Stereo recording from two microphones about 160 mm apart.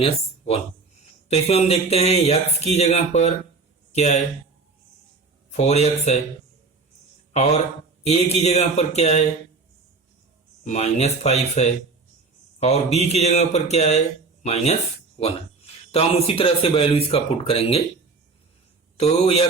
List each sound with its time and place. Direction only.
0.0 s speech: 40° left (ahead or behind)
5.5 s speech: 45° left (ahead or behind)
7.3 s speech: 45° left (ahead or behind)
10.6 s speech: 45° left (ahead or behind)
15.9 s speech: 35° left (ahead or behind)
18.9 s speech: 40° left (ahead or behind)